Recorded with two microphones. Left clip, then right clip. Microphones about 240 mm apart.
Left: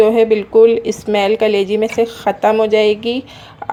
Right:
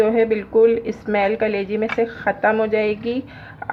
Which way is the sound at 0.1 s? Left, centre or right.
Centre.